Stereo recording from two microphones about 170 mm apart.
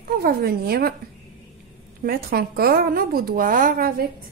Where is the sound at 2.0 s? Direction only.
65° right (ahead or behind).